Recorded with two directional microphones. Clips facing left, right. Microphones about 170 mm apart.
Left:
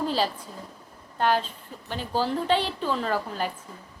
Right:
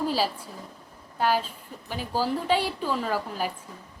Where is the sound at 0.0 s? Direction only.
10° right (ahead or behind).